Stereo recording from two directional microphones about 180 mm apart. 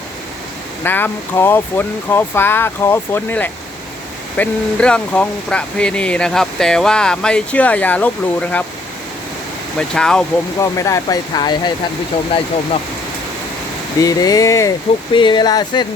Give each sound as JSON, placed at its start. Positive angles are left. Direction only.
{"t": 0.9, "sound": "speech", "side_deg": 10}
{"t": 9.7, "sound": "speech", "side_deg": 5}
{"t": 10.6, "sound": "speech", "side_deg": 15}
{"t": 14.0, "sound": "speech", "side_deg": 20}